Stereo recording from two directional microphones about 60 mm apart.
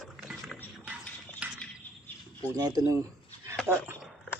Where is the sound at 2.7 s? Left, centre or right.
Right.